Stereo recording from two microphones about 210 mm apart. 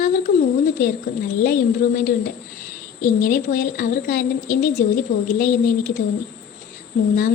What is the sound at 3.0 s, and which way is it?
A woman's voice, 40° left (ahead or behind).